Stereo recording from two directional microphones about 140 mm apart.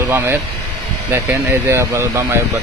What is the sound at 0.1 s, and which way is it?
Speech, 15° right (ahead or behind).